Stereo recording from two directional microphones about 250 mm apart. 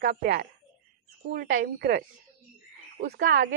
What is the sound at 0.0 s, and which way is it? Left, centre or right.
A woman's voice, right.